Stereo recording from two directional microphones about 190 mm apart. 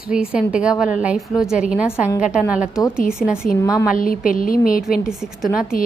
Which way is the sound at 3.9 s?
45° left (ahead or behind).